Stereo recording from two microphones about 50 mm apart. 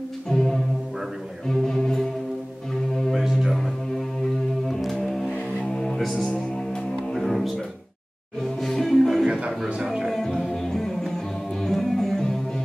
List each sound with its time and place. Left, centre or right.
0.3 s brass instrument: centre
1.5 s music: centre
3.0 s music: centre
5.0 s vehicle: centre
5.3 s music: centre
6.0 s music: centre
6.3 s music: centre
7.2 s music: centre